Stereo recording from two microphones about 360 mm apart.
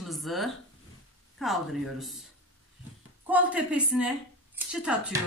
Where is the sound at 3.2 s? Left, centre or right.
Centre.